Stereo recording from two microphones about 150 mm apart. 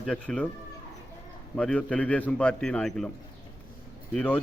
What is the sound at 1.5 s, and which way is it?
Speech, 5° left (ahead or behind).